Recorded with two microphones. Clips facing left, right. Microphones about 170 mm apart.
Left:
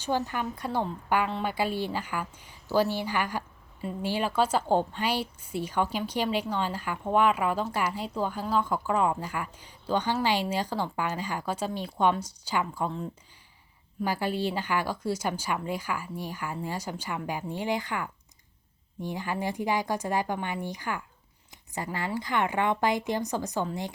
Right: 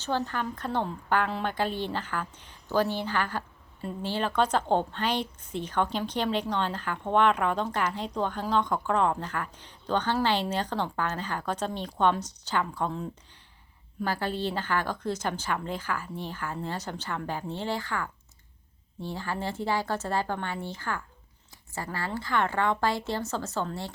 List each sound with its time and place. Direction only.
0.0 s a woman's voice: 15° left (ahead or behind)
14.0 s a woman's voice: 10° left (ahead or behind)